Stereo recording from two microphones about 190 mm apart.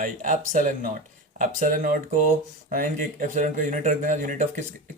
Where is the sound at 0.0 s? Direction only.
45° right (ahead or behind).